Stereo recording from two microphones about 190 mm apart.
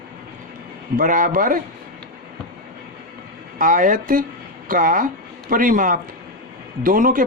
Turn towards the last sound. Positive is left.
turn(degrees=-45)  # may be behind; listen again after turning